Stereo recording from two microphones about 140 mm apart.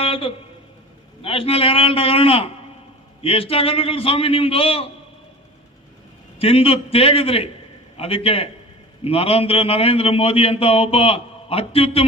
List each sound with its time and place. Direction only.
0.0 s a sound: 45° left (ahead or behind)
1.2 s a man's voice: 40° left (ahead or behind)
6.4 s a man's voice: 40° left (ahead or behind)